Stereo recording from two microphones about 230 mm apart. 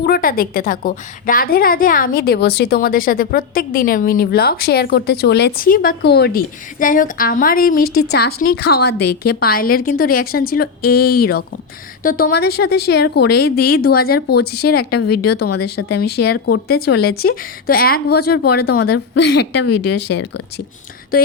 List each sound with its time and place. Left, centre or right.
0.0 s a woman's voice: left